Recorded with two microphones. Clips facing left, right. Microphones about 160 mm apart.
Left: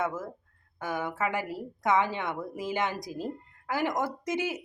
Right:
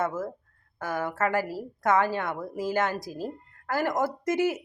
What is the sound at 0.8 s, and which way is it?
A woman's voice, 20° left (ahead or behind).